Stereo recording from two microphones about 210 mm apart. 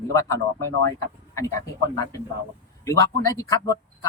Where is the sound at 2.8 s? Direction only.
15° left (ahead or behind).